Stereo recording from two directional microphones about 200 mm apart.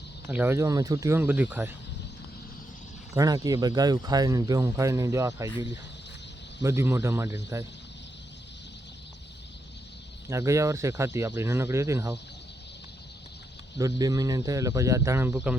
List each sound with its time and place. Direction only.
0.3 s speech: 10° right (ahead or behind)
3.2 s speech: 20° right (ahead or behind)
6.6 s speech: 15° right (ahead or behind)
10.2 s speech: 15° right (ahead or behind)
13.7 s speech: 15° right (ahead or behind)